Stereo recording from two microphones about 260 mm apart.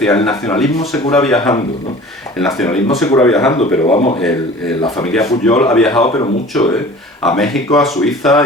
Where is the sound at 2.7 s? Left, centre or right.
Left.